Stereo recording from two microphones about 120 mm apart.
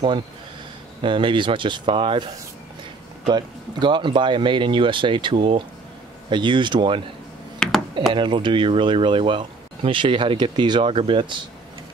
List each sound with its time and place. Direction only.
1.0 s speech: 45° right (ahead or behind)
3.3 s speech: 40° right (ahead or behind)
7.5 s a sound: 5° left (ahead or behind)
8.1 s speech: 40° right (ahead or behind)